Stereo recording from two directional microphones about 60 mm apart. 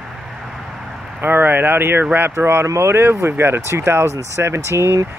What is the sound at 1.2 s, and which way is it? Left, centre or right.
Speech, right.